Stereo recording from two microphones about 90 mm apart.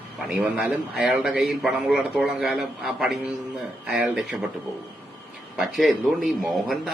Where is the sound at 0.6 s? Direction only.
15° right (ahead or behind).